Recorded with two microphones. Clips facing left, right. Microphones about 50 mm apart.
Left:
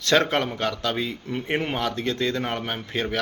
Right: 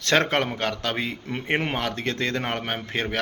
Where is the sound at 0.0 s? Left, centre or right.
Right.